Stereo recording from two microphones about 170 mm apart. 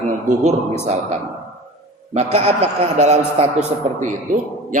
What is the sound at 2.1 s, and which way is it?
A man's voice, 40° right (ahead or behind).